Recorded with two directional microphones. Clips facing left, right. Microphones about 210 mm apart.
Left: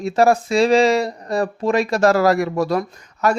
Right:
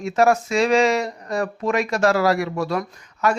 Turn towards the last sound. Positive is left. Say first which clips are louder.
# left 2 dB
turn(degrees=40)  # may be behind; listen again after turning